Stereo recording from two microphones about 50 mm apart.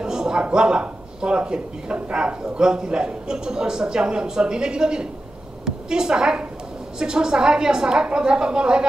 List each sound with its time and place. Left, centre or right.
0.0 s a man's voice: centre